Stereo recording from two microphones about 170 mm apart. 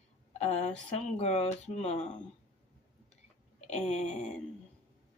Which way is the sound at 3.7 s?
40° left (ahead or behind).